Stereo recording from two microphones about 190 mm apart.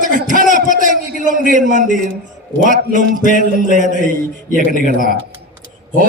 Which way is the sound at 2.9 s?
45° left (ahead or behind).